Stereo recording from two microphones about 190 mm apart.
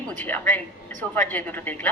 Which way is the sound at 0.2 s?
10° left (ahead or behind).